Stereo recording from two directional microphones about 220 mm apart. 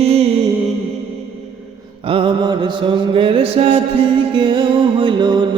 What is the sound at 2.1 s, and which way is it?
Mantra, 20° right (ahead or behind).